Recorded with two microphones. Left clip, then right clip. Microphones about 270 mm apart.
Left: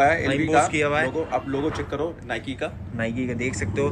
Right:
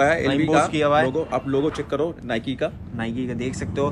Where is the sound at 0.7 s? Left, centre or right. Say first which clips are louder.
Right 3 dB; centre.